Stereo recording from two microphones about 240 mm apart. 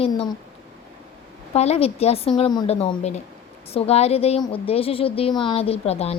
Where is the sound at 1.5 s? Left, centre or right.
Left.